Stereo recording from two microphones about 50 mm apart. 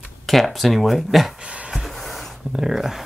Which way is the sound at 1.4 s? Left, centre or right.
Right.